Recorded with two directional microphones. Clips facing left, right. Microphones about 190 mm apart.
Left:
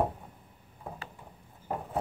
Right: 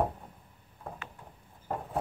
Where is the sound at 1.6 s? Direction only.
5° left (ahead or behind).